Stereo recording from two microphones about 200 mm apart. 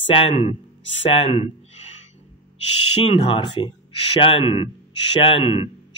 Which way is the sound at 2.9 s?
30° left (ahead or behind).